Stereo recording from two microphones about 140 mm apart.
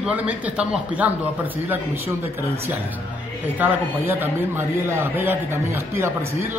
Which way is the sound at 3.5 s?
15° right (ahead or behind).